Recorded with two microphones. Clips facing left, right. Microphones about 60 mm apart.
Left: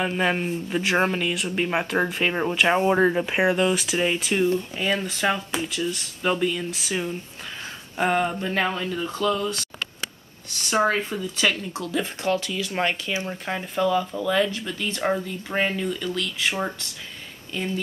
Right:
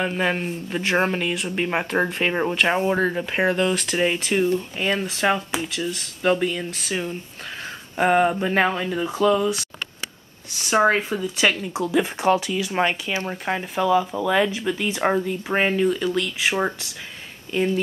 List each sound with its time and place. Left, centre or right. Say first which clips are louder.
0.0 s speech: even; centre
6.7 s speech: even; centre
7.9 s speech: right 4 dB; centre
11.1 s speech: right 4 dB; right
11.7 s speech: right 6 dB; centre